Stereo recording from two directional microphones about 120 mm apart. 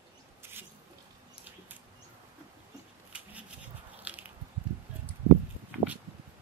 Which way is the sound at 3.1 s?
10° right (ahead or behind).